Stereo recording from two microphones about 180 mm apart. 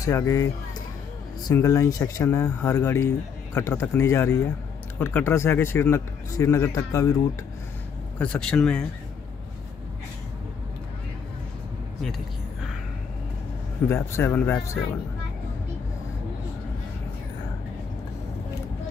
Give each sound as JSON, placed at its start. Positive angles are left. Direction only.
{"t": 0.0, "sound": "speech", "side_deg": 15}
{"t": 1.5, "sound": "speech", "side_deg": 15}
{"t": 8.2, "sound": "speech", "side_deg": 5}
{"t": 13.8, "sound": "speech", "side_deg": 15}